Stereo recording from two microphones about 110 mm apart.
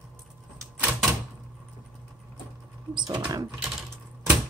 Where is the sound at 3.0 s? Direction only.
40° right (ahead or behind).